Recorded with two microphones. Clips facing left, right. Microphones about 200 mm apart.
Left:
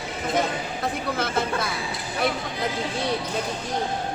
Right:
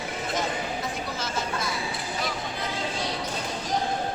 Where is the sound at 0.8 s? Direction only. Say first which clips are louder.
Left 5 dB; 60° left (ahead or behind).